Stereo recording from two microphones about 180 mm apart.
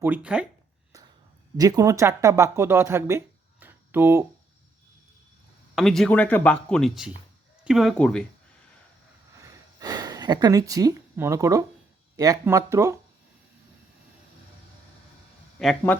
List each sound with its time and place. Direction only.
0.0 s speech: 5° right (ahead or behind)
1.5 s speech: 20° right (ahead or behind)
5.7 s speech: centre (ahead or behind)
9.4 s a sound: 20° right (ahead or behind)
12.1 s speech: 20° right (ahead or behind)
15.5 s speech: 5° left (ahead or behind)